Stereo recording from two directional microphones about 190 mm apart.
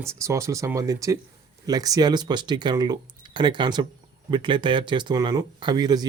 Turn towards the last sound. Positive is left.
turn(degrees=-20)  # may be behind; listen again after turning